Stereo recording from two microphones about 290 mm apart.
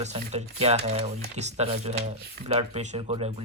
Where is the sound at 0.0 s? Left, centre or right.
Right.